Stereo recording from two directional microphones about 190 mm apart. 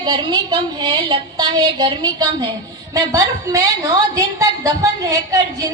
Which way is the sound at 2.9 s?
20° right (ahead or behind).